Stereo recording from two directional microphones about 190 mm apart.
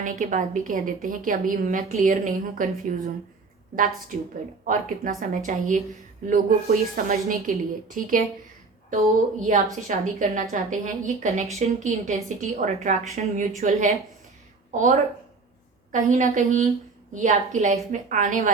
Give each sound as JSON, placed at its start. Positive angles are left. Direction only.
{"t": 0.0, "sound": "a woman's voice", "side_deg": -40}